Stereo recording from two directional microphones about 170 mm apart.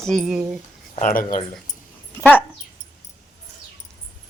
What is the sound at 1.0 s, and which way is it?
Speech, 55° left (ahead or behind).